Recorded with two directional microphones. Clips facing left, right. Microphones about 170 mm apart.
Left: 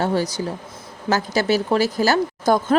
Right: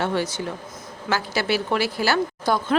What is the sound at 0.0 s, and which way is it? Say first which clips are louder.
A woman's voice: left 3 dB; 40° left (ahead or behind).